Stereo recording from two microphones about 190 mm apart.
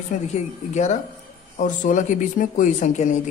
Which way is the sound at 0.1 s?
40° left (ahead or behind).